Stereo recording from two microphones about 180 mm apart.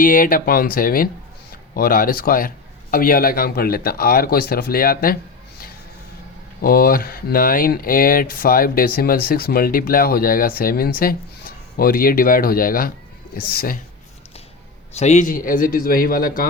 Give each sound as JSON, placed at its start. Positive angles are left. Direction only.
{"t": 0.0, "sound": "speech", "side_deg": 50}
{"t": 6.6, "sound": "speech", "side_deg": 55}
{"t": 14.9, "sound": "speech", "side_deg": 40}